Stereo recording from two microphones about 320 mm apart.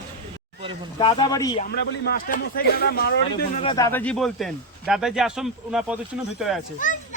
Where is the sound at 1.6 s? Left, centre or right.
Left.